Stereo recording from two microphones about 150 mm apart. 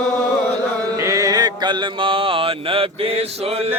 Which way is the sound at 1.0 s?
20° right (ahead or behind).